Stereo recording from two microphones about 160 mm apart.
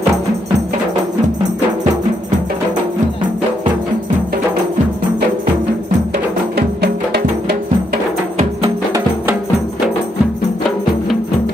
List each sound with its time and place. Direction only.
6.5 s music: 90° right